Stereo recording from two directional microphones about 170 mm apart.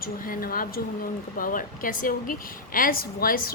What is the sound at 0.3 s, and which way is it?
A woman's voice, 55° left (ahead or behind).